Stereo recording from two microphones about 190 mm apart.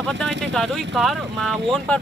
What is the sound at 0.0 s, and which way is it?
Speech, 5° left (ahead or behind).